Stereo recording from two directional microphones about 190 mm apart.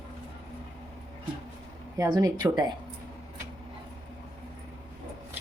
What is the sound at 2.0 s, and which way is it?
Speech, 20° right (ahead or behind).